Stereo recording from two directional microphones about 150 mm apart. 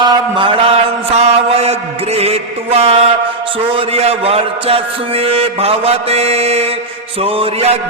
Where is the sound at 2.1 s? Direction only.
45° right (ahead or behind).